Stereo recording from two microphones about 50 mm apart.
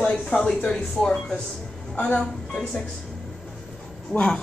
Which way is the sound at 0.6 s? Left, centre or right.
Left.